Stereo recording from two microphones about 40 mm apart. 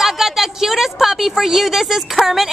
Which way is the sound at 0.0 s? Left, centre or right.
Centre.